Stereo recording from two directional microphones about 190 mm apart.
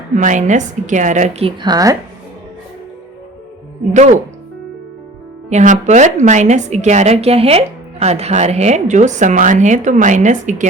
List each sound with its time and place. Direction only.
0.2 s a woman's voice: 40° right (ahead or behind); by 2.0 s 20° right (ahead or behind)
5.5 s a woman's voice: 40° right (ahead or behind)